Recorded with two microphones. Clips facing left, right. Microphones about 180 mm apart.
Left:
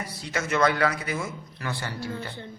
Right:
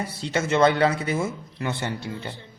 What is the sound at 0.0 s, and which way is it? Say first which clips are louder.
A man's voice: right 5 dB; 25° right (ahead or behind).